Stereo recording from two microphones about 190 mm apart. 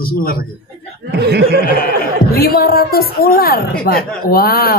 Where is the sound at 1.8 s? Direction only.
50° left (ahead or behind).